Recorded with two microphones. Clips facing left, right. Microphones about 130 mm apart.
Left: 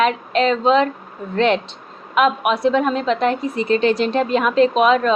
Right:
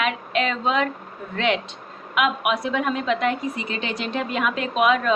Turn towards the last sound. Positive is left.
turn(degrees=25)  # may be behind; listen again after turning